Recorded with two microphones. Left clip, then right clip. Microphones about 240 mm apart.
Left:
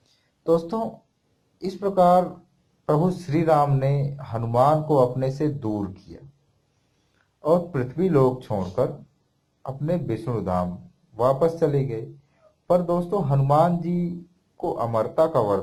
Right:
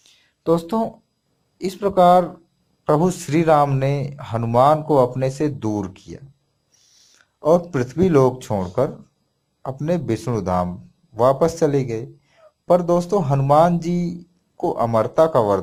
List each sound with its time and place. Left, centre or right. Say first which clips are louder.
0.4 s speech: right 3 dB; right
7.4 s speech: right 4 dB; right